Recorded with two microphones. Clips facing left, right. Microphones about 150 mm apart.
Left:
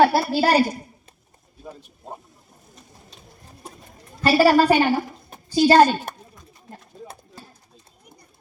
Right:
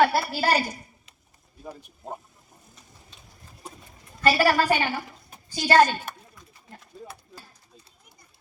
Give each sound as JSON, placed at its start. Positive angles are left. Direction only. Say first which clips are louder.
{"t": 0.0, "sound": "a woman's voice", "louder": "left 5 dB", "side_deg": 35}
{"t": 4.4, "sound": "a woman's voice", "louder": "left 10 dB", "side_deg": 30}